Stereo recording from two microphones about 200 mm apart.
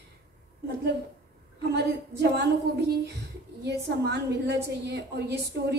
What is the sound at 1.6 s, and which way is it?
A woman's voice, 55° right (ahead or behind).